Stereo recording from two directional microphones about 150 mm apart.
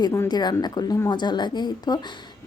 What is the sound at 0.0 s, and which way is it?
A woman's voice, 25° left (ahead or behind).